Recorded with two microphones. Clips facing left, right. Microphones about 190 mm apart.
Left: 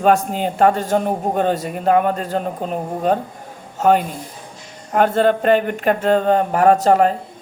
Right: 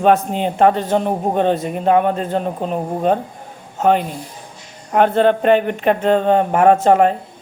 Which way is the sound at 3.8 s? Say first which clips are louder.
Even; 45° left (ahead or behind).